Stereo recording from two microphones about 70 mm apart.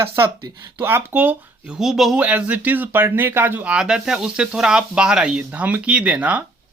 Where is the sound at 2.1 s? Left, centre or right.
Centre.